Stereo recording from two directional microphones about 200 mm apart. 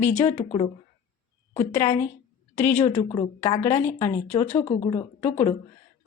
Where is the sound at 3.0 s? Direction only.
25° left (ahead or behind).